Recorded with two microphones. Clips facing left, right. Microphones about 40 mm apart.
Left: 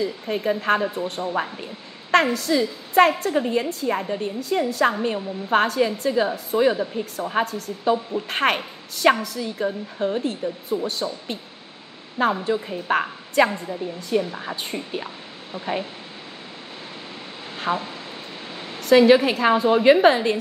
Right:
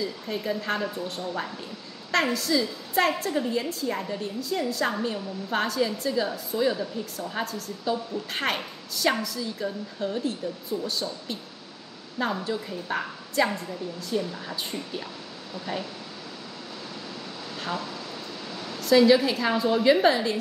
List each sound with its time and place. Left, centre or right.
0.0 s a woman's voice: left
4.4 s a woman's voice: left
9.7 s a woman's voice: left
13.6 s a woman's voice: left
17.6 s a woman's voice: left